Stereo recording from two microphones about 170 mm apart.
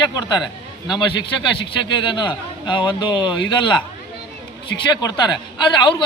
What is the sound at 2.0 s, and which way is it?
Speech, 30° left (ahead or behind).